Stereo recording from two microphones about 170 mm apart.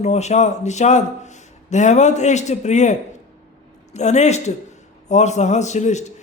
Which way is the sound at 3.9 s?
40° left (ahead or behind).